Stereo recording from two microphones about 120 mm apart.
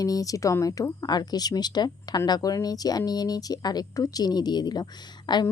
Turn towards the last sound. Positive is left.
turn(degrees=40)  # may be behind; listen again after turning